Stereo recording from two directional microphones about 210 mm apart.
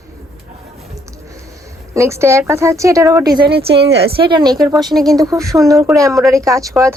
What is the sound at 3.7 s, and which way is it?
Speech, 55° right (ahead or behind).